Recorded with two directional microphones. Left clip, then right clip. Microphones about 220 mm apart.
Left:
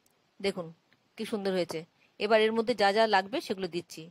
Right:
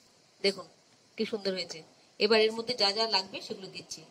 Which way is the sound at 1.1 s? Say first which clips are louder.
Left 1 dB; 10° left (ahead or behind).